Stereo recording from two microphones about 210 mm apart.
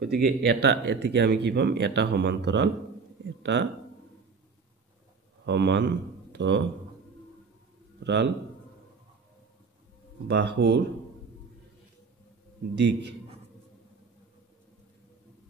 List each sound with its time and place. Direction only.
0.0 s speech: 50° right (ahead or behind)
5.4 s speech: 55° right (ahead or behind)
8.0 s a man's voice: 55° right (ahead or behind)
10.2 s speech: 55° right (ahead or behind)
12.7 s speech: 55° right (ahead or behind)